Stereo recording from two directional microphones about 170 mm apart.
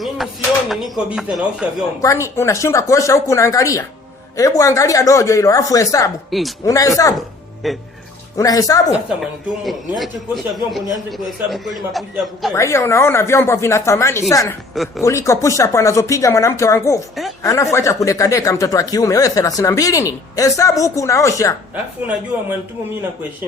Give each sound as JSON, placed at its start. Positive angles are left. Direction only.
{"t": 0.2, "sound": "a man's voice", "side_deg": 0}
{"t": 2.0, "sound": "speech", "side_deg": 20}
{"t": 6.3, "sound": "a man's voice", "side_deg": 0}
{"t": 6.7, "sound": "speech", "side_deg": 20}
{"t": 7.6, "sound": "a man's voice", "side_deg": 0}
{"t": 8.4, "sound": "speech", "side_deg": 20}
{"t": 9.5, "sound": "a man's voice", "side_deg": 0}
{"t": 12.5, "sound": "speech", "side_deg": 15}
{"t": 22.3, "sound": "a man's voice", "side_deg": -10}